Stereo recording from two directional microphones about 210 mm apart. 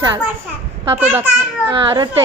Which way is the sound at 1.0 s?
10° right (ahead or behind).